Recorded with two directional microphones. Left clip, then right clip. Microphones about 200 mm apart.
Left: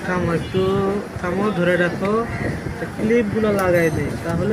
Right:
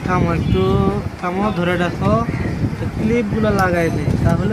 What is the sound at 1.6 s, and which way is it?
Speech, 35° right (ahead or behind).